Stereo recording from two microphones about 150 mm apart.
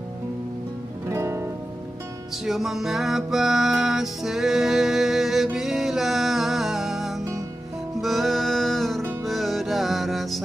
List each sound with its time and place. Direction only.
1.0 s music: 15° right (ahead or behind)
2.4 s music: centre (ahead or behind)